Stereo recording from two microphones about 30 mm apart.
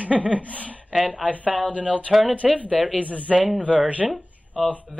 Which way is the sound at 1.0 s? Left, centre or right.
Right.